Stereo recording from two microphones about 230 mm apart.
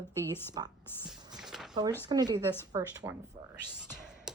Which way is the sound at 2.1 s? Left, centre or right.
Centre.